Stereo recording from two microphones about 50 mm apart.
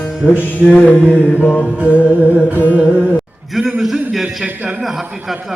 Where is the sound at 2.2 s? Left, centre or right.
Left.